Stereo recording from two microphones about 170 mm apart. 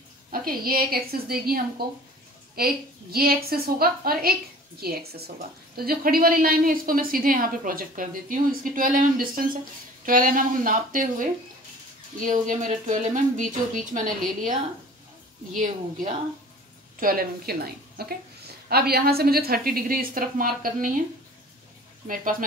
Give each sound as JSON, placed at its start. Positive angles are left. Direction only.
{"t": 0.3, "sound": "speech", "side_deg": -60}
{"t": 12.3, "sound": "speech", "side_deg": -45}
{"t": 15.5, "sound": "speech", "side_deg": -50}
{"t": 22.0, "sound": "speech", "side_deg": -55}